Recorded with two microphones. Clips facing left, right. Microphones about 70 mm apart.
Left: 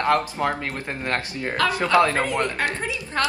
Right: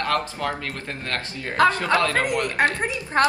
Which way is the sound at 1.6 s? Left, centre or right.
Right.